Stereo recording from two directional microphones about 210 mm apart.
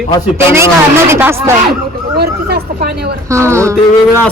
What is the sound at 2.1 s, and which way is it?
Speech, 50° right (ahead or behind).